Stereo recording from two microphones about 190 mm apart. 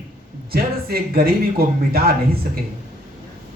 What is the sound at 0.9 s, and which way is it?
A man's voice, 55° right (ahead or behind).